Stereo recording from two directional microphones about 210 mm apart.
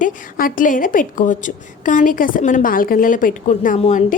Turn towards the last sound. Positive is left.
turn(degrees=35)  # may be behind; listen again after turning